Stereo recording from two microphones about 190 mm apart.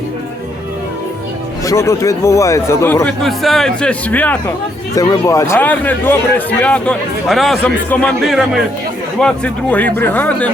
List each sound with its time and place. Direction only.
1.6 s a man's voice: 15° left (ahead or behind)
3.2 s a man's voice: centre (ahead or behind)